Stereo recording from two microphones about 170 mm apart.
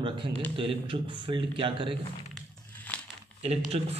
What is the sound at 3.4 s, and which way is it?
Speech, 35° right (ahead or behind).